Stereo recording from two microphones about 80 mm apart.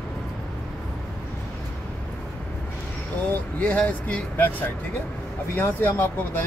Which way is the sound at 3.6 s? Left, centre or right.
Centre.